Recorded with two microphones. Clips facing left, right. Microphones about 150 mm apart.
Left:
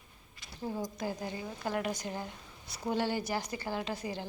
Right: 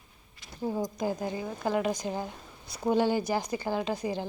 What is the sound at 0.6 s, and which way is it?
A woman's voice, 20° right (ahead or behind).